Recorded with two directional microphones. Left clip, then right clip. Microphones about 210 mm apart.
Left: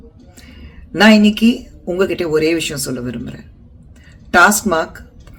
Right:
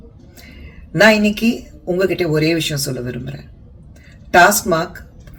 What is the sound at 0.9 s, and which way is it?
Speech, 15° left (ahead or behind).